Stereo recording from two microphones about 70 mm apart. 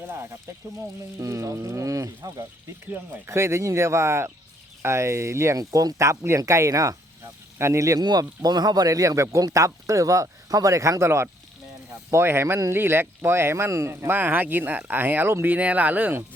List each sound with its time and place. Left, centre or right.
0.1 s speech: right
0.8 s speech: right
3.2 s speech: right
7.9 s speech: right
13.9 s speech: right
15.5 s speech: right